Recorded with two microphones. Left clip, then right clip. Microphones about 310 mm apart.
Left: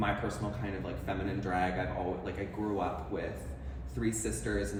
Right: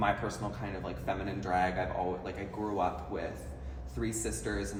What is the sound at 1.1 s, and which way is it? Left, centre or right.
Speech, centre.